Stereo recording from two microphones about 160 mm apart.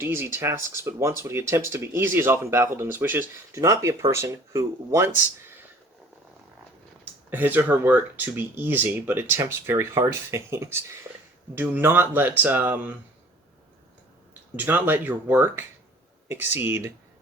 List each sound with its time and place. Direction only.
0.0 s speech: 15° right (ahead or behind)
7.0 s speech: 10° right (ahead or behind)
11.1 s a sound: 15° right (ahead or behind)
11.5 s speech: 10° right (ahead or behind)
14.5 s speech: 10° right (ahead or behind)